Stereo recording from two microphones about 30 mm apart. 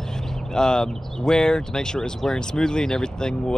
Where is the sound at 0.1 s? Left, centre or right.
Left.